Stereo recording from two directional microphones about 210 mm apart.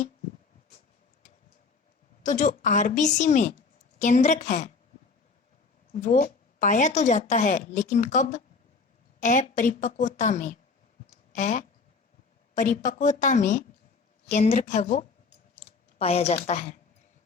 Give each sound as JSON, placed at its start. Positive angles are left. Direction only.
{"t": 2.2, "sound": "a woman's voice", "side_deg": 35}
{"t": 5.9, "sound": "a woman's voice", "side_deg": 35}
{"t": 11.0, "sound": "clicking", "side_deg": 35}
{"t": 12.5, "sound": "a woman's voice", "side_deg": 40}